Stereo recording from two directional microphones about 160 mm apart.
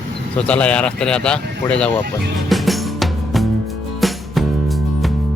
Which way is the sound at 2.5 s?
Centre (ahead or behind).